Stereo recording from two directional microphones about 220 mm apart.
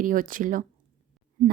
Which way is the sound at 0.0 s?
35° right (ahead or behind).